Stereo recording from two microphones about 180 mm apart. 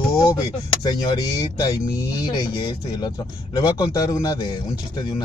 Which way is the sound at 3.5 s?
20° left (ahead or behind).